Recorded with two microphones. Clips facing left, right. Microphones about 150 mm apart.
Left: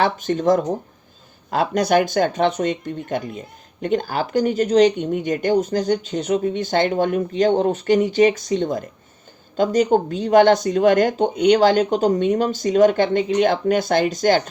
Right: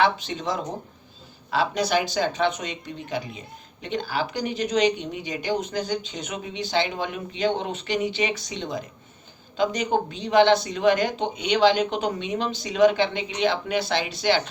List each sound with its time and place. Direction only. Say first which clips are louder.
0.0 s speech: left 4 dB; 50° left (ahead or behind)